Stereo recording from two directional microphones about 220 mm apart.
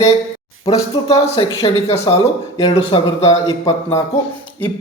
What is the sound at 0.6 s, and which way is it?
Speech, 25° left (ahead or behind).